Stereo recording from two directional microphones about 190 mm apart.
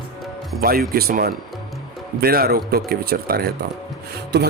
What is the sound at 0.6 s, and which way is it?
Speech, 50° right (ahead or behind).